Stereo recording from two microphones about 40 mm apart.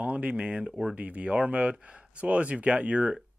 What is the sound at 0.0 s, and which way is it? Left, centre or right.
Speech, right.